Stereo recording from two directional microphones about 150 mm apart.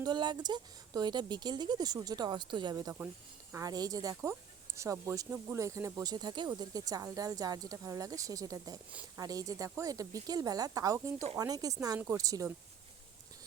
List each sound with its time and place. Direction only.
0.0 s speech: 30° right (ahead or behind)